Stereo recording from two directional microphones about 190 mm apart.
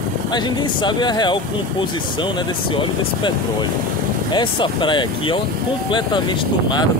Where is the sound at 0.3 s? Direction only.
20° left (ahead or behind).